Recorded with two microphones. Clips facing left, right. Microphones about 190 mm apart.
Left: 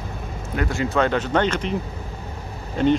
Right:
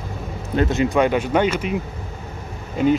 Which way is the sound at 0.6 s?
20° right (ahead or behind).